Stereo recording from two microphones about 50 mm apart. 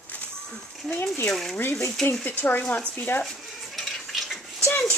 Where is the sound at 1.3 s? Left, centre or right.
Centre.